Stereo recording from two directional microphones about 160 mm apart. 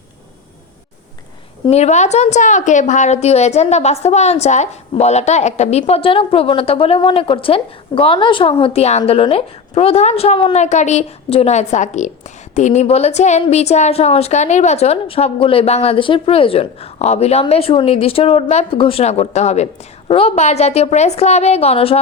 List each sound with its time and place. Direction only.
1.7 s a woman's voice: 45° left (ahead or behind)